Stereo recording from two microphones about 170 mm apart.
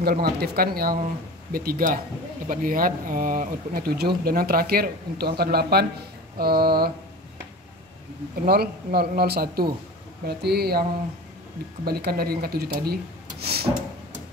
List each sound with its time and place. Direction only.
0.0 s speech: 65° right (ahead or behind)
8.5 s speech: 65° right (ahead or behind)
13.4 s a sound: 65° right (ahead or behind)